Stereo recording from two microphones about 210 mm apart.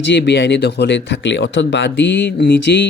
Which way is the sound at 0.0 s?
55° left (ahead or behind).